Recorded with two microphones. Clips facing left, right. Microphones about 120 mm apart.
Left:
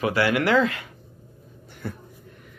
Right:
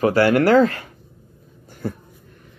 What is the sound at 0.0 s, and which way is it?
Speech, 40° right (ahead or behind).